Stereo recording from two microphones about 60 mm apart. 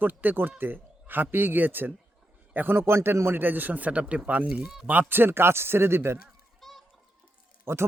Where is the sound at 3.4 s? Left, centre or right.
Right.